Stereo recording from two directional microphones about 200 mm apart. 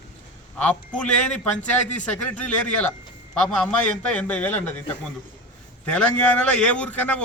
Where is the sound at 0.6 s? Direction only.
5° left (ahead or behind).